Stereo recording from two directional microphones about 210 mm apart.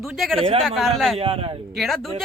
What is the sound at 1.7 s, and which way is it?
Speech, centre (ahead or behind).